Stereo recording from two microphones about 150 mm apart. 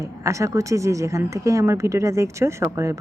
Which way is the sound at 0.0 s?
20° right (ahead or behind).